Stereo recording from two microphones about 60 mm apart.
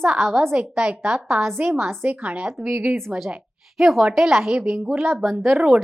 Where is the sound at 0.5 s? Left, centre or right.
Centre.